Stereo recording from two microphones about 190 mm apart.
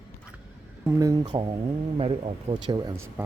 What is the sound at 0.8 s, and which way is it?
Speech, 15° right (ahead or behind).